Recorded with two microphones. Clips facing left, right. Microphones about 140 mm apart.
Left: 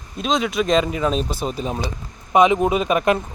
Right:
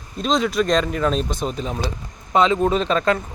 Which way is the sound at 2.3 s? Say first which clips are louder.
Left 2 dB; 15° left (ahead or behind).